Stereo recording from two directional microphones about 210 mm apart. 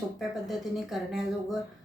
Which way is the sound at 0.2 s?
Centre (ahead or behind).